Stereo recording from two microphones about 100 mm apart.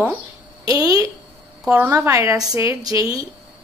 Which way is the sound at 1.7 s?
25° right (ahead or behind).